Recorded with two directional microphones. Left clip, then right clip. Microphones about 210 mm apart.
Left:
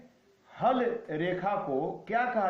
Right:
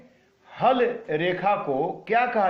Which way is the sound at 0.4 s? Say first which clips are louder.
Right 6 dB; 35° right (ahead or behind).